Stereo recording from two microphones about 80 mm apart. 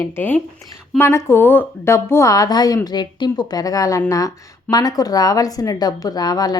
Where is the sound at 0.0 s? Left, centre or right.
Left.